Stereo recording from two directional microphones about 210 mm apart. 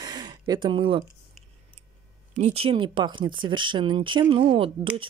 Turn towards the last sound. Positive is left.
turn(degrees=-25)  # may be behind; listen again after turning